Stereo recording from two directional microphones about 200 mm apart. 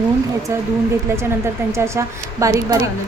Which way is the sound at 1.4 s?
15° right (ahead or behind).